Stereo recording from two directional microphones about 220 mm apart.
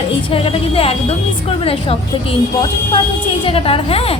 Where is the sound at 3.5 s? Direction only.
25° left (ahead or behind).